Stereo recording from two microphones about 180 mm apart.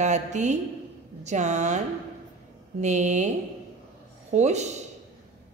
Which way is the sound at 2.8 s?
40° right (ahead or behind).